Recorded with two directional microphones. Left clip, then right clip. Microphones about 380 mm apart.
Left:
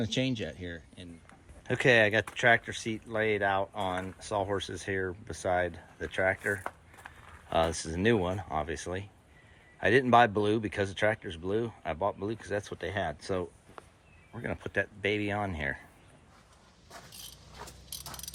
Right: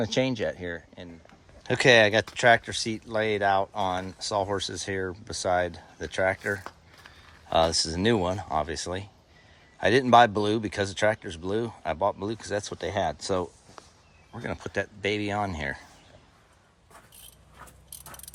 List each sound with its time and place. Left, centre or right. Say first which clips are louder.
0.0 s speech: right 6 dB; centre
1.6 s speech: right 5 dB; centre